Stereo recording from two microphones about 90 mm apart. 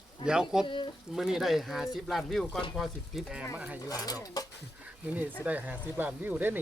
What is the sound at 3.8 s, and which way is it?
Speech, 45° left (ahead or behind).